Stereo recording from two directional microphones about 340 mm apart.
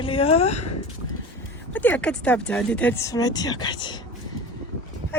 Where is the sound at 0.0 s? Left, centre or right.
Centre.